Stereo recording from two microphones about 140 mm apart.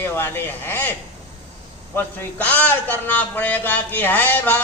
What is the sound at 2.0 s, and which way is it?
A man's voice, 10° left (ahead or behind).